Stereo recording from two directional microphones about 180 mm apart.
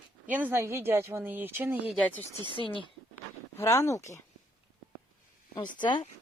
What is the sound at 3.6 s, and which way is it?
Speech, 15° left (ahead or behind).